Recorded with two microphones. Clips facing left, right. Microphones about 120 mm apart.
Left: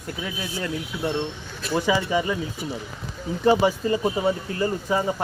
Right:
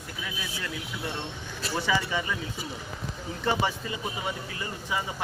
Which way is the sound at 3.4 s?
35° left (ahead or behind).